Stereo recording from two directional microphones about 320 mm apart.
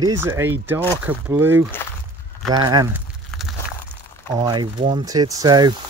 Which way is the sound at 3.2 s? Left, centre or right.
Centre.